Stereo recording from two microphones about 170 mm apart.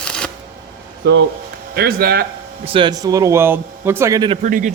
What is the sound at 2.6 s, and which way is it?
Speech, 30° right (ahead or behind).